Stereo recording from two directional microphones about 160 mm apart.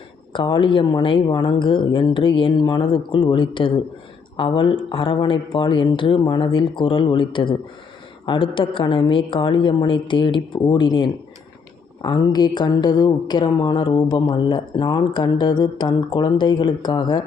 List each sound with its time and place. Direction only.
0.3 s speech: 30° left (ahead or behind)